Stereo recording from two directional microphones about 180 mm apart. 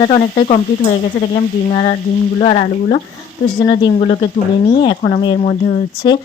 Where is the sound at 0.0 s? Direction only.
30° left (ahead or behind).